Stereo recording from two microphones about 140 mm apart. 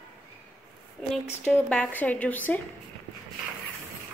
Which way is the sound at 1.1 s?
5° left (ahead or behind).